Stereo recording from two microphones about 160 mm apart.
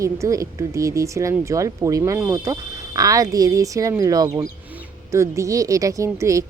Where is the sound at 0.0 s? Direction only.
20° right (ahead or behind).